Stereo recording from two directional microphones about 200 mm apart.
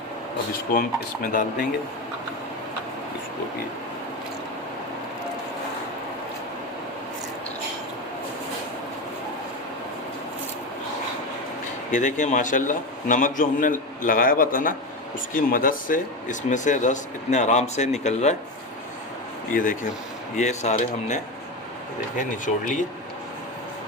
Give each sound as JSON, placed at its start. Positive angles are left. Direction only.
{"t": 0.7, "sound": "speech", "side_deg": 45}
{"t": 11.9, "sound": "speech", "side_deg": 40}
{"t": 19.5, "sound": "speech", "side_deg": 45}
{"t": 22.2, "sound": "speech", "side_deg": 40}